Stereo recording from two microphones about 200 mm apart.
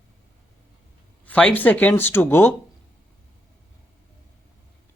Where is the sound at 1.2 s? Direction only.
5° left (ahead or behind).